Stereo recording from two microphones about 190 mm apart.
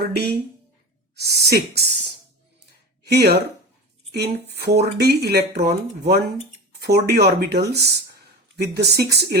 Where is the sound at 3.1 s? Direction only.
60° right (ahead or behind).